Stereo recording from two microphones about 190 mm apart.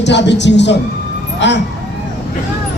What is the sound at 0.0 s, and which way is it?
A man's voice, 65° left (ahead or behind).